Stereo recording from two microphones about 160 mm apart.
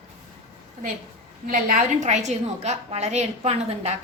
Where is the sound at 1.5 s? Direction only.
60° right (ahead or behind).